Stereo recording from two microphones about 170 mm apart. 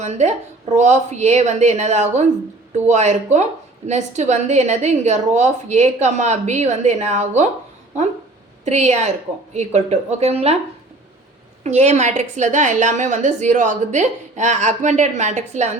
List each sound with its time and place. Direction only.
0.0 s a woman's voice: 40° right (ahead or behind)
8.6 s a woman's voice: 40° right (ahead or behind)
11.6 s a woman's voice: 40° right (ahead or behind)